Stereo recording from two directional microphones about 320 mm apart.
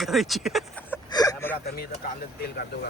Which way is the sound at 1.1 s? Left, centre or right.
Centre.